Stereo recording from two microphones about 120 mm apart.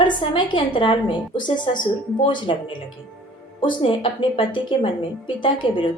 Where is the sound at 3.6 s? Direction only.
45° left (ahead or behind).